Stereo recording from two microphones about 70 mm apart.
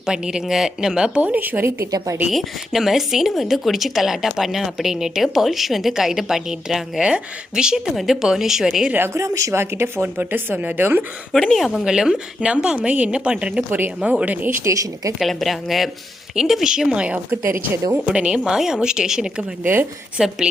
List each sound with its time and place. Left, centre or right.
0.0 s a woman's voice: centre; by 1.7 s right
2.3 s speech: centre
9.1 s speech: right
9.5 s speech: right
11.5 s speech: centre
11.9 s a woman's voice: centre
13.7 s speech: right
14.0 s speech: centre
14.6 s speech: right
15.3 s a woman's voice: centre
19.4 s speech: right
20.1 s a woman's voice: centre